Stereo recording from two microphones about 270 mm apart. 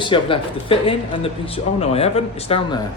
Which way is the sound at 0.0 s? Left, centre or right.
Centre.